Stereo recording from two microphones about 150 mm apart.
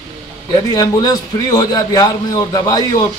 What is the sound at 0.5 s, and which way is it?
A man's voice, 25° left (ahead or behind).